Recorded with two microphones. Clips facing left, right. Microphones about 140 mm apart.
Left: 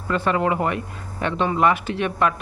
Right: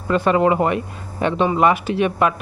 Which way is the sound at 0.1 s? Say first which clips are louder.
Right 5 dB; 20° right (ahead or behind).